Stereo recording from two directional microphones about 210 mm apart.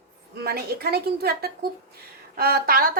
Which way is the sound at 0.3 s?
45° right (ahead or behind).